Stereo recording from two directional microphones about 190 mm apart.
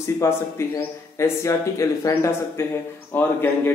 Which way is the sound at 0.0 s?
15° left (ahead or behind).